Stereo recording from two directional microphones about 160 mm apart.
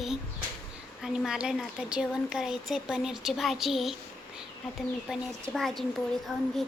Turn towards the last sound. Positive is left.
turn(degrees=0)  # may be behind; listen again after turning